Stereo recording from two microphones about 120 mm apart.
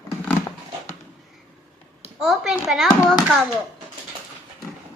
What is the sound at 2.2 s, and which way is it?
Speech, centre (ahead or behind).